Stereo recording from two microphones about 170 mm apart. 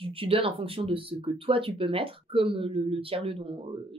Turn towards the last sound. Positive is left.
turn(degrees=-30)  # may be behind; listen again after turning